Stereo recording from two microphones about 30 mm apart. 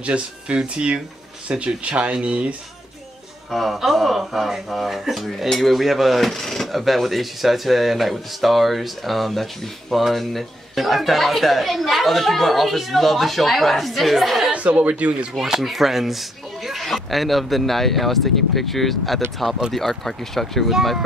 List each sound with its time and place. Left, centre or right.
0.0 s speech: right
1.6 s speech: right
3.5 s speech: centre
14.5 s speech: right
15.3 s speech: centre